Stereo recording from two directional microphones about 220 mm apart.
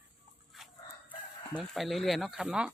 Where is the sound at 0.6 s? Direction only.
Centre (ahead or behind).